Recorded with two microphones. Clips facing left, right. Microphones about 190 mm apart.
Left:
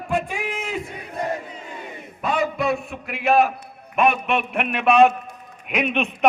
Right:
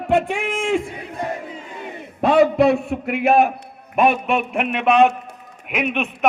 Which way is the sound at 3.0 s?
60° right (ahead or behind).